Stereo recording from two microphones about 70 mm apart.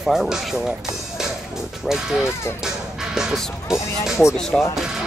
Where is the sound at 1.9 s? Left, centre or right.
Centre.